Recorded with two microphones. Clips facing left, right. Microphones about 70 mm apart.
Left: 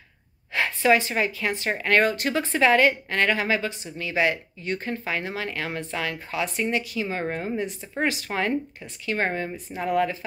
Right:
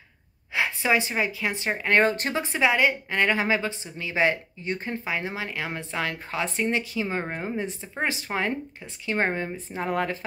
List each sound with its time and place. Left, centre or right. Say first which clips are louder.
0.5 s speech: left 3 dB; centre
2.4 s speech: left 3 dB; centre; by 10.1 s right